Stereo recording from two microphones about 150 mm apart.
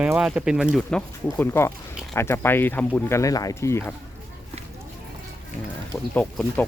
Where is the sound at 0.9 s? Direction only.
15° left (ahead or behind).